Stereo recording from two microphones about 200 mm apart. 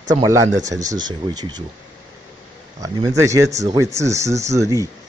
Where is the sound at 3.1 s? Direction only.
15° right (ahead or behind).